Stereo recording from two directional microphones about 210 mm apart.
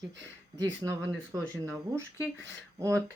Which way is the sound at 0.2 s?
60° right (ahead or behind).